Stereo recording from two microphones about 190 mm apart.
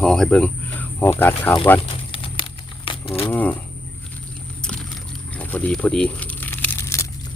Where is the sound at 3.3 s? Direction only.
10° left (ahead or behind).